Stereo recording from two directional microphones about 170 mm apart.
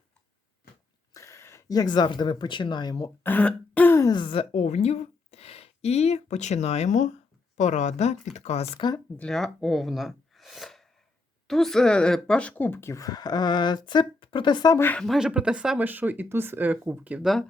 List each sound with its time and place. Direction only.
1.1 s speech: 15° left (ahead or behind); by 8.6 s 40° left (ahead or behind)
8.7 s speech: 25° left (ahead or behind)
9.1 s speech: 5° left (ahead or behind)